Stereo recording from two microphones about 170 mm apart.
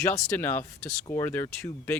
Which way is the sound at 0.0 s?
15° left (ahead or behind).